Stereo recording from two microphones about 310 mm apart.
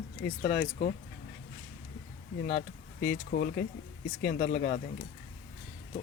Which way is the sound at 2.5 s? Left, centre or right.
Left.